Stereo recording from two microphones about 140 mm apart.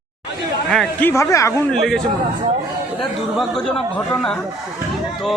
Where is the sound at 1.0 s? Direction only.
20° left (ahead or behind).